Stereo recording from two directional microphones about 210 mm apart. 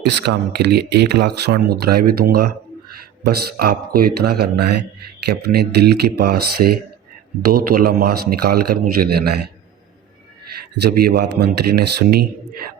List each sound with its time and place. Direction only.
0.0 s speech: 50° right (ahead or behind)
10.9 s speech: 50° right (ahead or behind)